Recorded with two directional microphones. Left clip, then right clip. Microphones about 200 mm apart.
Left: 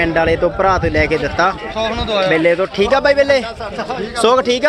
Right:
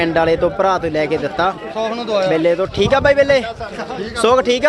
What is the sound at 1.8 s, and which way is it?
Speech, 30° right (ahead or behind).